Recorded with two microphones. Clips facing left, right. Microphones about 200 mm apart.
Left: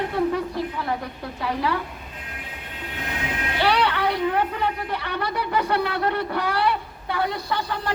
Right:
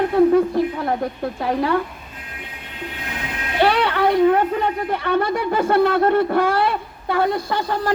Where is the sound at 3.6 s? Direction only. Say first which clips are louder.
Right 5 dB; 50° right (ahead or behind).